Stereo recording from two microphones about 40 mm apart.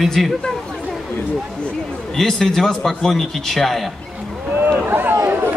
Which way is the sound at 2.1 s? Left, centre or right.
Centre.